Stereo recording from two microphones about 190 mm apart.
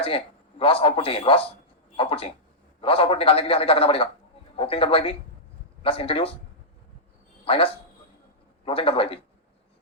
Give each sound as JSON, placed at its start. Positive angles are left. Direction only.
{"t": 0.6, "sound": "a man's voice", "side_deg": 30}
{"t": 7.4, "sound": "a man's voice", "side_deg": 30}